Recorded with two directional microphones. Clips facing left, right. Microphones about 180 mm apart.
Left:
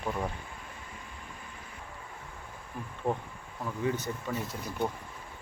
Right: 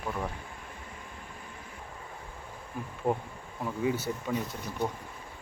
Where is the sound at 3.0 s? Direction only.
5° right (ahead or behind).